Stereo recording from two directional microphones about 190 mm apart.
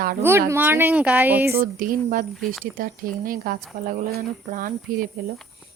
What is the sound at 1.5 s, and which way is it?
Speech, 50° right (ahead or behind).